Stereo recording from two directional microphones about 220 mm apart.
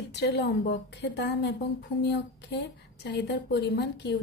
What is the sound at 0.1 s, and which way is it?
A woman's voice, 50° left (ahead or behind).